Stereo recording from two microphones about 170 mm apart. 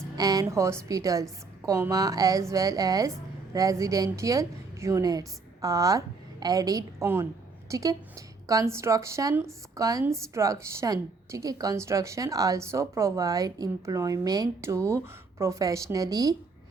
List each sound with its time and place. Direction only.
0.2 s a woman's voice: 20° right (ahead or behind)